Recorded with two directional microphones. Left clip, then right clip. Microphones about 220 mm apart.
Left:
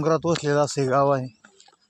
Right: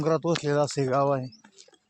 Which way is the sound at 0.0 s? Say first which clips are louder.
Left 3 dB; 25° left (ahead or behind).